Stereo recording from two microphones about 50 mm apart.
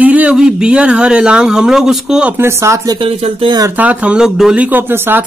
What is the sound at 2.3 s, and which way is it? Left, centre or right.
Speech, right.